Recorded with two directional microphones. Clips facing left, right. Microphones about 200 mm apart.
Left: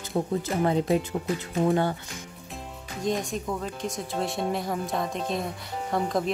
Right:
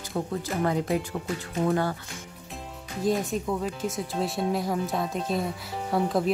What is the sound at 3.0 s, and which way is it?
Speech, 5° right (ahead or behind).